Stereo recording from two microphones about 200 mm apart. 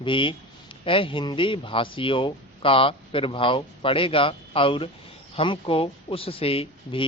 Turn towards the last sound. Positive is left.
turn(degrees=25)  # may be behind; listen again after turning